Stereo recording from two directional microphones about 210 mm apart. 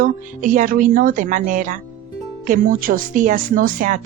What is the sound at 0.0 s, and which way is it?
A woman's voice, 40° right (ahead or behind).